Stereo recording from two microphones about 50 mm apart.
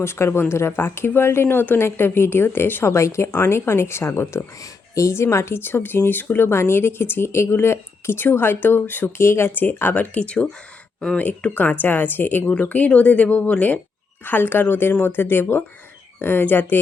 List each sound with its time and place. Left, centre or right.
0.0 s speech: left
2.9 s speech: left
3.4 s speech: left
4.9 s speech: left
9.1 s speech: left
9.5 s speech: left
10.2 s speech: left
11.2 s speech: left
12.5 s speech: left
14.3 s speech: left